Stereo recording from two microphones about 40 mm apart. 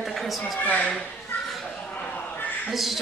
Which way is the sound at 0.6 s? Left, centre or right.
Left.